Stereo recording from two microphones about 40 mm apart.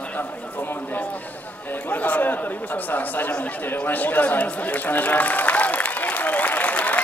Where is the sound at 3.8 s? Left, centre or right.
Left.